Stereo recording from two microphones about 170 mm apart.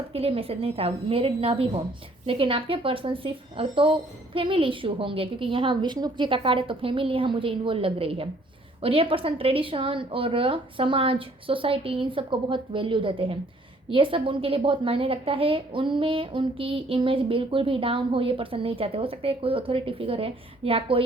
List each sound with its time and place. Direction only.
0.1 s a woman's voice: 35° right (ahead or behind)